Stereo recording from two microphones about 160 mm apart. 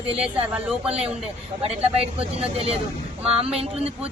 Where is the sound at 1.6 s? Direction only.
40° right (ahead or behind).